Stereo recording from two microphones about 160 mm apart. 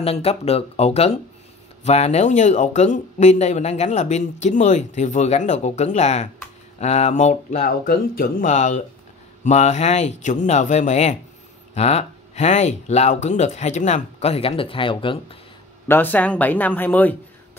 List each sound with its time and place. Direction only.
0.0 s speech: 40° left (ahead or behind)
15.9 s speech: 10° left (ahead or behind)